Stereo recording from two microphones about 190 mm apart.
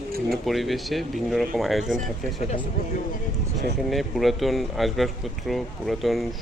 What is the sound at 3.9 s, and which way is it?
Speech, centre (ahead or behind).